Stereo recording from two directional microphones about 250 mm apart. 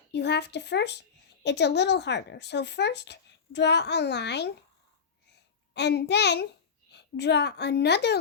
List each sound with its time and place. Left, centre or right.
0.1 s speech: left
5.7 s a woman's voice: left